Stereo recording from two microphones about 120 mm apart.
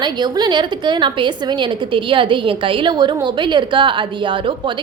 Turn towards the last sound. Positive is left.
turn(degrees=-45)  # may be behind; listen again after turning